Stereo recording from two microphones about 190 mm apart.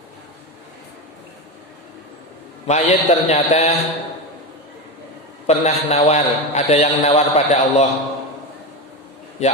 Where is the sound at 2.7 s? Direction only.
35° left (ahead or behind).